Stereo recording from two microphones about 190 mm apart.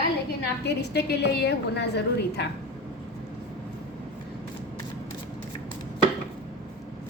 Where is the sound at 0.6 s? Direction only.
60° left (ahead or behind).